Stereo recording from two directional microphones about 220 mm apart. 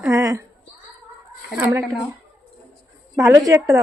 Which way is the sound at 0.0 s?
15° right (ahead or behind).